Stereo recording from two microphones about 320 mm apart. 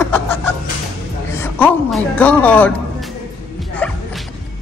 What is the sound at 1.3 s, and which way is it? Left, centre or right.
A woman's voice, centre.